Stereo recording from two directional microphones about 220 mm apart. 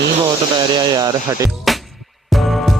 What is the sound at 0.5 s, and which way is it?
Speech, 20° right (ahead or behind).